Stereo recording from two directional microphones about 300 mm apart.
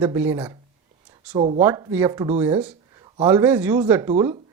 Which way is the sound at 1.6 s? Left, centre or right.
Centre.